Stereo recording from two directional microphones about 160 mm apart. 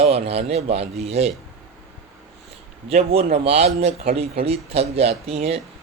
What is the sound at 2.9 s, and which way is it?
Speech, 40° right (ahead or behind).